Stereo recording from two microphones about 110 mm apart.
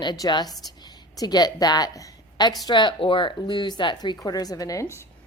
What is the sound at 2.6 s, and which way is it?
Speech, 45° left (ahead or behind).